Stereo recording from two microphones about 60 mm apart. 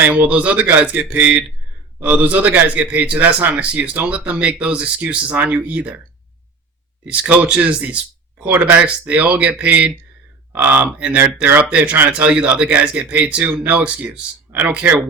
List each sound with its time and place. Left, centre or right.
0.0 s speech: right
7.0 s speech: right
10.5 s speech: right